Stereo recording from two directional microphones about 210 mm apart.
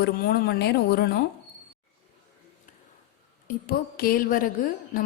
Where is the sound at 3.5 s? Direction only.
45° left (ahead or behind).